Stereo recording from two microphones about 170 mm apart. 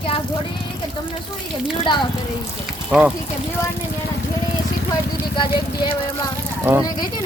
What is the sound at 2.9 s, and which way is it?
Speech, 5° right (ahead or behind).